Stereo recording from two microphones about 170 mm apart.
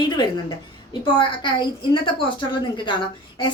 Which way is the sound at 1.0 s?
30° left (ahead or behind).